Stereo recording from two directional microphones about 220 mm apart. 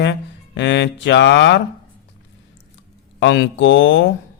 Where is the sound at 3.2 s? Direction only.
55° left (ahead or behind).